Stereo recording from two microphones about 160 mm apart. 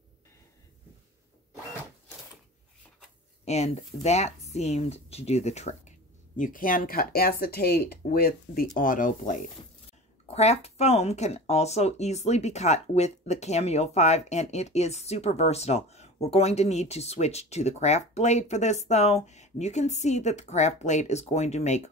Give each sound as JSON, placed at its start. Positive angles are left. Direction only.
{"t": 3.4, "sound": "speech", "side_deg": 40}
{"t": 10.2, "sound": "speech", "side_deg": 40}